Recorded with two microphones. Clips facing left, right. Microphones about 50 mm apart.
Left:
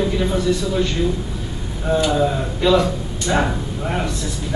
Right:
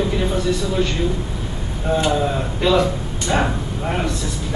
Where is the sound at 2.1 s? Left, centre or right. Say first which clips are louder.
Left 1 dB; centre.